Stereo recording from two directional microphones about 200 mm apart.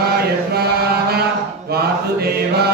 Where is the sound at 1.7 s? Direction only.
50° right (ahead or behind).